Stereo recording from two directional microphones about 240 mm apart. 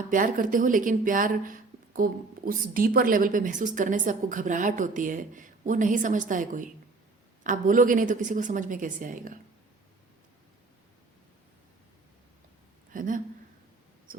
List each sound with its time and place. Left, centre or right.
0.1 s speech: right
12.9 s speech: right
14.1 s a sound: right